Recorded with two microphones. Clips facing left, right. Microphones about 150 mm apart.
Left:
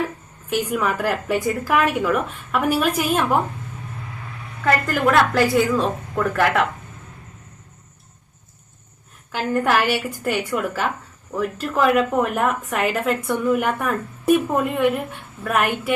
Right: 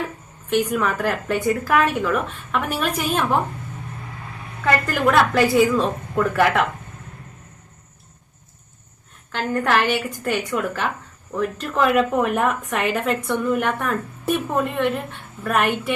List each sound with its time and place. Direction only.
0.5 s a woman's voice: 5° left (ahead or behind)
4.6 s a woman's voice: centre (ahead or behind)
9.3 s a woman's voice: 5° left (ahead or behind)